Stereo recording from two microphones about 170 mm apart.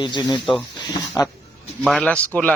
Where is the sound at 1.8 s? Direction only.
5° left (ahead or behind).